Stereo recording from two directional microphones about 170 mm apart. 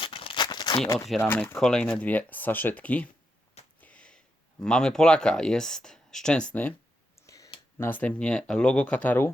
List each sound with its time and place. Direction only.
0.0 s crumpling: 30° left (ahead or behind)
0.9 s speech: centre (ahead or behind)
1.2 s speech: 15° left (ahead or behind)
3.8 s a sound: 5° left (ahead or behind)
4.6 s speech: 5° left (ahead or behind)